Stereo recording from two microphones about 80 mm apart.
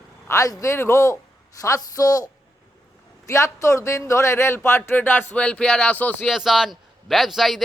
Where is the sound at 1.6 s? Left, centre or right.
Left.